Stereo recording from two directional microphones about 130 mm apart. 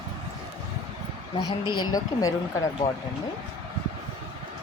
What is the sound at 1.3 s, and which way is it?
A woman's voice, 35° left (ahead or behind).